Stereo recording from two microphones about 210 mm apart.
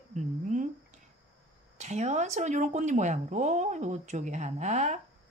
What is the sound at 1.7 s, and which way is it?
Speech, 35° right (ahead or behind).